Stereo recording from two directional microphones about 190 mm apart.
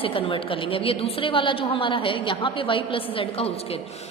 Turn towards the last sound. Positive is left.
turn(degrees=30)  # may be behind; listen again after turning